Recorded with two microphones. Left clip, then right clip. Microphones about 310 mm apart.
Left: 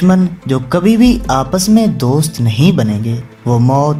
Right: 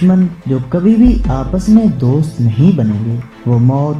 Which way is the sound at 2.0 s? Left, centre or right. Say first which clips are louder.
Left 2 dB; left.